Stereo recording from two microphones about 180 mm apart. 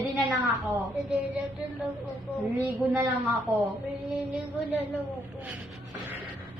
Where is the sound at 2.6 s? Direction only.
10° right (ahead or behind).